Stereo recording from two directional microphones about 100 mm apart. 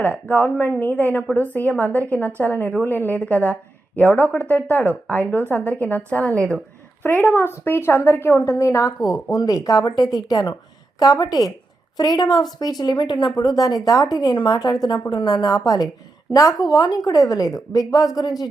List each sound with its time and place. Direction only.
0.0 s a woman's voice: 15° left (ahead or behind); by 18.4 s 40° left (ahead or behind)